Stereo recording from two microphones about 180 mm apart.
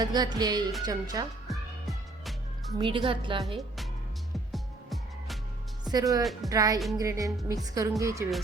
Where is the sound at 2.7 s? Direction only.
30° right (ahead or behind).